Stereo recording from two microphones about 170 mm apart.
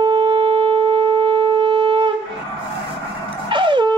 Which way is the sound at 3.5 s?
30° right (ahead or behind).